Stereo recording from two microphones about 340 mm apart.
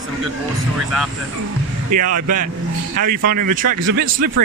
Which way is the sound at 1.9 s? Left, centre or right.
Right.